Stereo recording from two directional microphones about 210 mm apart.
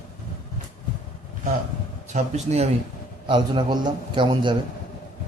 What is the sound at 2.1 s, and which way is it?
Speech, 30° right (ahead or behind).